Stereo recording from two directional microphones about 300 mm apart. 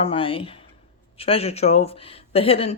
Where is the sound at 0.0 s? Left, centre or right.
Centre.